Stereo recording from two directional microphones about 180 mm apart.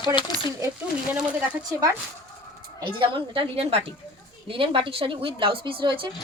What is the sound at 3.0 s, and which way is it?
A woman's voice, 30° right (ahead or behind).